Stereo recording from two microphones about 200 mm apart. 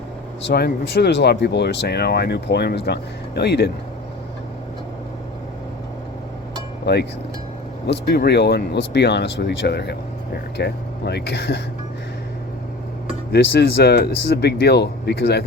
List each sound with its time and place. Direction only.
0.4 s speech: 55° left (ahead or behind)
6.8 s speech: 55° left (ahead or behind)
13.3 s speech: 55° left (ahead or behind)